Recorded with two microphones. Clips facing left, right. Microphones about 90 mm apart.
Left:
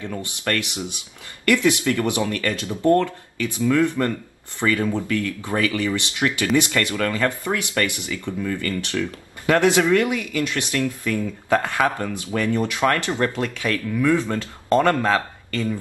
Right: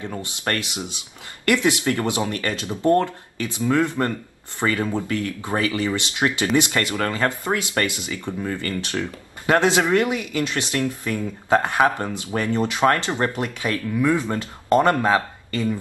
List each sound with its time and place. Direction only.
0.2 s speech: 20° right (ahead or behind)
8.4 s speech: 35° right (ahead or behind); by 15.7 s 20° right (ahead or behind)